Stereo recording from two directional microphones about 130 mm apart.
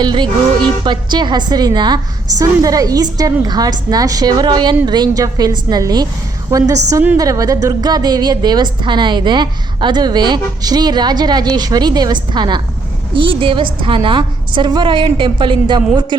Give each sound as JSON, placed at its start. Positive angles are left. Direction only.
{"t": 0.0, "sound": "a woman's voice", "side_deg": -35}